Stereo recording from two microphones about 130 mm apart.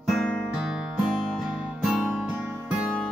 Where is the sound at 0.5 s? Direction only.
5° right (ahead or behind).